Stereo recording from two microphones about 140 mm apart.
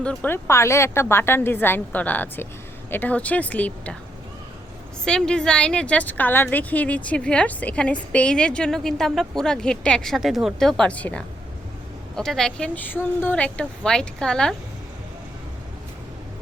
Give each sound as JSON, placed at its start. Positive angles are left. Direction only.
{"t": 0.0, "sound": "a woman's voice", "side_deg": 10}
{"t": 5.0, "sound": "a woman's voice", "side_deg": 5}